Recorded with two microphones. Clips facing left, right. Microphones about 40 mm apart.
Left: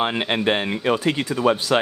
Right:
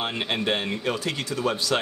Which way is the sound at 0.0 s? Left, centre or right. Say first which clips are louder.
Left 6 dB; left.